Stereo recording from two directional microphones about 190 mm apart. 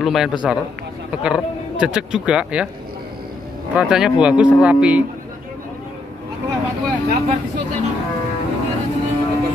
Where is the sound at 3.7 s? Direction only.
5° right (ahead or behind).